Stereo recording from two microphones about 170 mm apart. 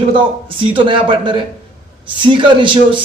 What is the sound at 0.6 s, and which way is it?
A man's voice, 30° right (ahead or behind).